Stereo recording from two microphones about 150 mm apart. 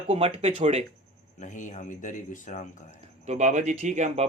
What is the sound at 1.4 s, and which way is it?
Speech, 55° left (ahead or behind).